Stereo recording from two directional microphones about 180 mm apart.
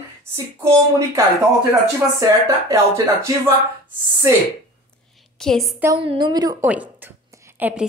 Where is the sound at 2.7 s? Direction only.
15° right (ahead or behind).